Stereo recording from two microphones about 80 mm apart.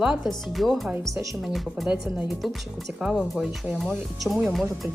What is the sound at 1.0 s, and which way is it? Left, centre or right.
Speech, right.